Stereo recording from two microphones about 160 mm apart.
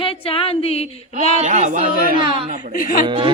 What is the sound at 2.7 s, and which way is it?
Speech, 60° left (ahead or behind).